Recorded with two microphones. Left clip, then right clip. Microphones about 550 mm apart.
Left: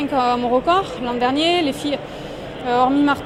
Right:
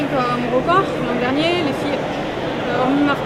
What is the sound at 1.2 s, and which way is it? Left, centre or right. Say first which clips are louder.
Speech: left 3 dB; left.